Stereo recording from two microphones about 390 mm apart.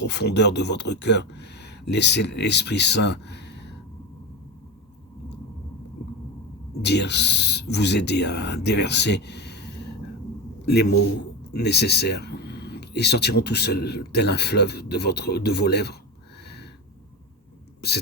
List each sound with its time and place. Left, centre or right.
0.0 s speech: left
6.8 s speech: left
17.7 s a sound: left